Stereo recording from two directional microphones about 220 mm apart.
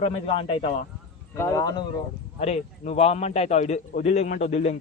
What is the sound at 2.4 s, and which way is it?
A man's voice, 30° left (ahead or behind).